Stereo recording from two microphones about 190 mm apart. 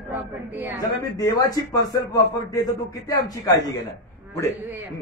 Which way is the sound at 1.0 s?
20° left (ahead or behind).